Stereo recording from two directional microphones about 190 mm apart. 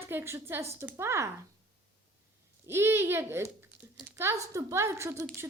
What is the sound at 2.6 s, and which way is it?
Speech, 15° right (ahead or behind).